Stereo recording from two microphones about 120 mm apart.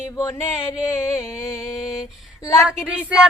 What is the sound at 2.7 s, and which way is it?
Music, 10° right (ahead or behind).